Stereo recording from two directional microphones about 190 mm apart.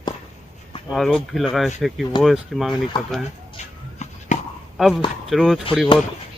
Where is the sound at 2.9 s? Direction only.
25° left (ahead or behind).